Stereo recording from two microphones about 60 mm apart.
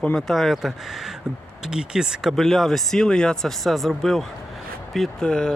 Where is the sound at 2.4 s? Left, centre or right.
Centre.